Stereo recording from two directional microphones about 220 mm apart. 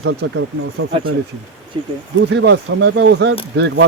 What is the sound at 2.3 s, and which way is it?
Speech, 55° right (ahead or behind).